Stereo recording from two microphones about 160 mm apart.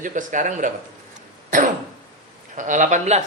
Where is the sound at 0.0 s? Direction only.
55° right (ahead or behind).